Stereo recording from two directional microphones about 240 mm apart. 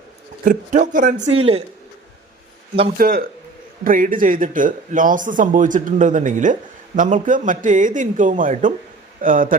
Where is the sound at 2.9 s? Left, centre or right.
Right.